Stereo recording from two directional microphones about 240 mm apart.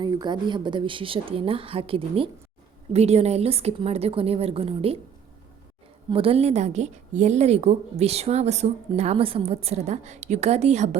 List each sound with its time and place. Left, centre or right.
0.0 s a woman's voice: centre
6.1 s a woman's voice: right